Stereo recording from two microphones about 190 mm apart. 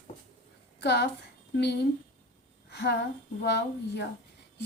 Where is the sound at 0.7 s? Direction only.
60° left (ahead or behind).